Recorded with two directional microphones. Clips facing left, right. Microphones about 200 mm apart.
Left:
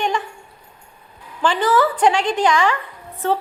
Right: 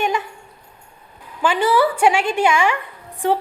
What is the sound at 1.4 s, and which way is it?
A woman's voice, 10° right (ahead or behind).